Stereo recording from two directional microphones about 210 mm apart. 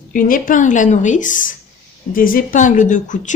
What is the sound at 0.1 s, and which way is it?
Speech, 40° left (ahead or behind).